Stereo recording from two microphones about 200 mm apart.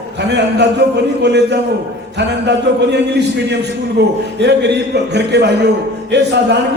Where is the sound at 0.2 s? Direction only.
60° right (ahead or behind).